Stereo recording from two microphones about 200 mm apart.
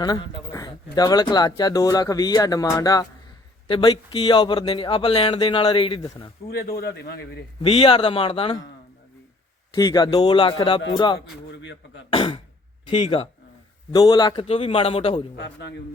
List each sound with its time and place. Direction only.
0.0 s speech: 20° left (ahead or behind)
6.5 s a man's voice: 50° left (ahead or behind)
7.6 s speech: 30° left (ahead or behind)
9.7 s speech: 20° left (ahead or behind)
11.5 s a sound: 60° left (ahead or behind)
12.1 s speech: 25° left (ahead or behind)
15.4 s a man's voice: 60° left (ahead or behind)